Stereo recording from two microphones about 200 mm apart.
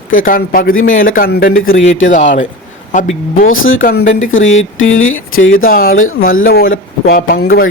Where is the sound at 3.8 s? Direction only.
50° left (ahead or behind).